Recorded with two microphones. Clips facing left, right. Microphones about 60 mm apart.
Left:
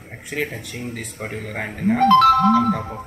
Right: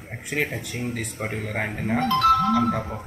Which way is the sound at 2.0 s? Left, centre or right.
Left.